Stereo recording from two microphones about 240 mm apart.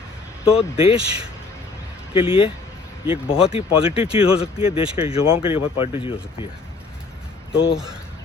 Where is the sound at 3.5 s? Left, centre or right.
Left.